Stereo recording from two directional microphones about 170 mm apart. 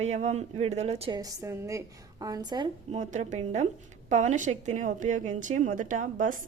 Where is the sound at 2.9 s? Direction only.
45° right (ahead or behind).